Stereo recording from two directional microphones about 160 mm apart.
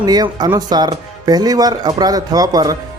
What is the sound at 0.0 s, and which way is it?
Speech, 25° right (ahead or behind).